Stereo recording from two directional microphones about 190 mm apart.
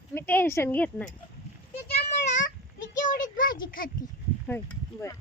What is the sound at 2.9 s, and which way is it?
Child singing, 45° left (ahead or behind).